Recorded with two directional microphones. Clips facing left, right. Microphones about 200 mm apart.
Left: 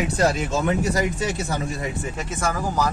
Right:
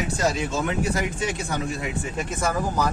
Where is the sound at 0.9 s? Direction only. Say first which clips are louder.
Left 3 dB; 40° left (ahead or behind).